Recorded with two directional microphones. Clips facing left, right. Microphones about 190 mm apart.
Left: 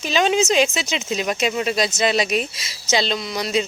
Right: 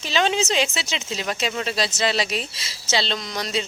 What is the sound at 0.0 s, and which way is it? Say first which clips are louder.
Speech: left 4 dB; 15° left (ahead or behind).